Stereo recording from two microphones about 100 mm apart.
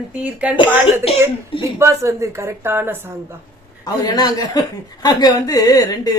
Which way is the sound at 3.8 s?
40° left (ahead or behind).